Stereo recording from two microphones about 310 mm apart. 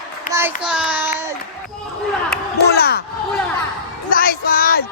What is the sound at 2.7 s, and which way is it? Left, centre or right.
Speech, left.